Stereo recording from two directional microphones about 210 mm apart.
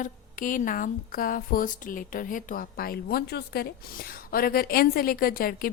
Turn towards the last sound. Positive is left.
turn(degrees=45)  # may be behind; listen again after turning